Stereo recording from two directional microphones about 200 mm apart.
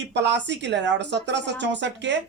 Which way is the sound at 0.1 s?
60° right (ahead or behind).